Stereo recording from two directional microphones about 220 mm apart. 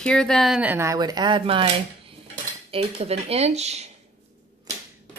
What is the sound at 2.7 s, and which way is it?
Speech, 25° right (ahead or behind).